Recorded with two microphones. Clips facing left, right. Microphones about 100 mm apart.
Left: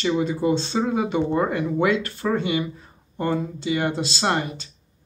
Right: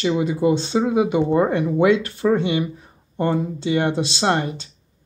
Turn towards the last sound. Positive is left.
turn(degrees=-25)  # may be behind; listen again after turning